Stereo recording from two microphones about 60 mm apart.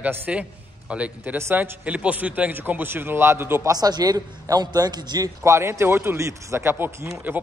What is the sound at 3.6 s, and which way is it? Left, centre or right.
A man's voice, right.